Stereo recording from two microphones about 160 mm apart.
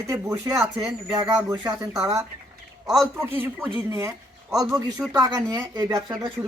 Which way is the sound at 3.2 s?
15° right (ahead or behind).